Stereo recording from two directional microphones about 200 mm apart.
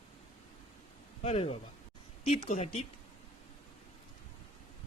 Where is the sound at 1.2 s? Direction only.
30° left (ahead or behind).